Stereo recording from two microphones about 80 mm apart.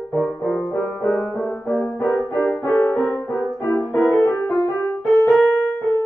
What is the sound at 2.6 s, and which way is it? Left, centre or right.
Music, left.